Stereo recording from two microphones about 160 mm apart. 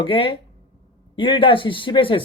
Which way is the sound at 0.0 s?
35° left (ahead or behind).